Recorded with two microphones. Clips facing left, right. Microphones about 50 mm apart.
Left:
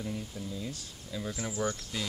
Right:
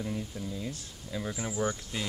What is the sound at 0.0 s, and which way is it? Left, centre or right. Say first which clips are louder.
Speech: right 2 dB; centre.